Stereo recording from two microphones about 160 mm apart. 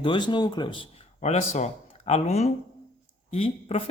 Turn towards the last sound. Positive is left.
turn(degrees=35)  # may be behind; listen again after turning